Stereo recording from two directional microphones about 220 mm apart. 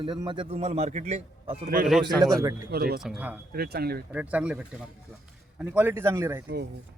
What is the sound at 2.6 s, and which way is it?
Speech, 45° right (ahead or behind).